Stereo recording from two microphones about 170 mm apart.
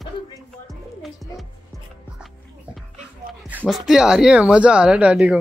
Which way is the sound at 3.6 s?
Centre (ahead or behind).